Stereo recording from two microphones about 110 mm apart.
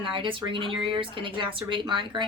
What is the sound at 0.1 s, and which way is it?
A woman's voice, 50° right (ahead or behind).